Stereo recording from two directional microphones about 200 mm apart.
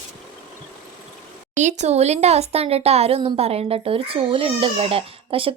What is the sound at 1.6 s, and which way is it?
Speech, 35° right (ahead or behind).